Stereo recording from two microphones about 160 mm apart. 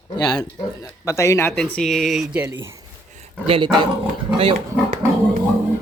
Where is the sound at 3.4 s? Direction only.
30° right (ahead or behind).